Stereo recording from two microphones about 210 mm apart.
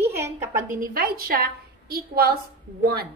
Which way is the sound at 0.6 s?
45° right (ahead or behind).